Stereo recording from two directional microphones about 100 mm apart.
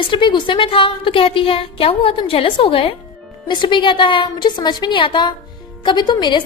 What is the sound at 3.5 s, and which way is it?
A woman's voice, 50° left (ahead or behind).